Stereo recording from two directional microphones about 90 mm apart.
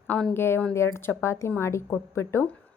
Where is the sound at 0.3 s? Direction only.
25° left (ahead or behind).